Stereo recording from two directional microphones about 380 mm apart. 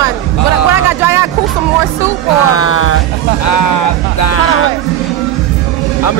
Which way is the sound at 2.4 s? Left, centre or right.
Left.